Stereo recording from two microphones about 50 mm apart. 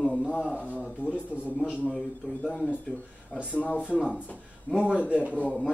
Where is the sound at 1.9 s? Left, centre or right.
Left.